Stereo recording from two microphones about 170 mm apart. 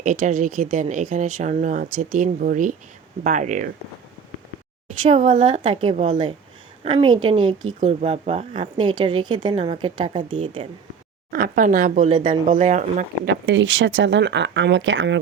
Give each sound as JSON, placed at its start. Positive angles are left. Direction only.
{"t": 0.0, "sound": "speech", "side_deg": -50}
{"t": 5.0, "sound": "speech", "side_deg": -40}
{"t": 5.5, "sound": "speech", "side_deg": -30}
{"t": 6.8, "sound": "a woman's voice", "side_deg": -30}
{"t": 11.3, "sound": "speech", "side_deg": -60}
{"t": 13.2, "sound": "speech", "side_deg": -90}